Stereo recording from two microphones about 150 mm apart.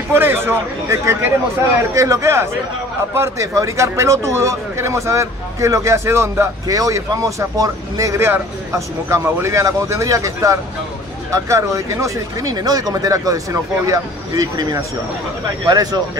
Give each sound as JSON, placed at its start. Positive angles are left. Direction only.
{"t": 0.1, "sound": "a man's voice", "side_deg": -15}